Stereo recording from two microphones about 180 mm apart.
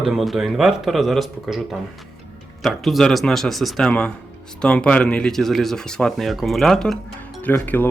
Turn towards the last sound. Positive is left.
turn(degrees=10)  # may be behind; listen again after turning